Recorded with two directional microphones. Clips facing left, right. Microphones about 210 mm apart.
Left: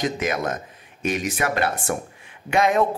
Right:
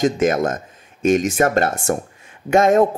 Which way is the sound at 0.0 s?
45° right (ahead or behind).